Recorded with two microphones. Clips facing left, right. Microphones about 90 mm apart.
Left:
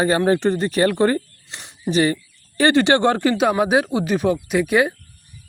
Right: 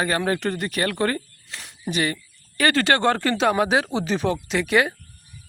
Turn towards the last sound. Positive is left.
turn(degrees=15)  # may be behind; listen again after turning